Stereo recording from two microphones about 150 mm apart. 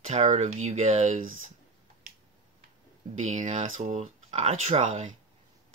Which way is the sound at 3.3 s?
55° right (ahead or behind).